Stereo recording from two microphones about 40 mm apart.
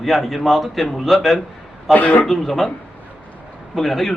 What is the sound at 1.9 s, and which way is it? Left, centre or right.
Speech, left.